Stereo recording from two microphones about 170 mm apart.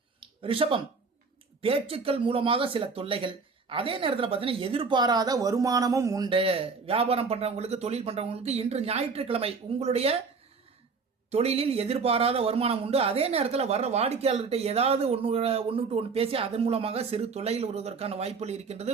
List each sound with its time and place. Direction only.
0.4 s speech: 30° right (ahead or behind)
11.3 s speech: 35° right (ahead or behind)